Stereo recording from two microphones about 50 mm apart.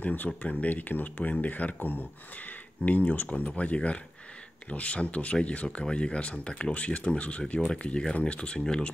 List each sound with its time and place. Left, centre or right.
0.0 s speech: left; by 8.9 s centre